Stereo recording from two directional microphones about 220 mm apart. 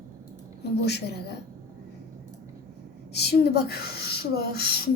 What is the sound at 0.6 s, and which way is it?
Speech, 50° left (ahead or behind).